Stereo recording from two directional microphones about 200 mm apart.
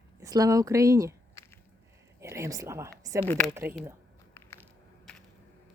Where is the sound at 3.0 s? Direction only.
15° right (ahead or behind).